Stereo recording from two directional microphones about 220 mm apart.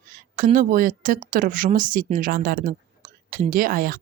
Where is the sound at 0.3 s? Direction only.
35° right (ahead or behind).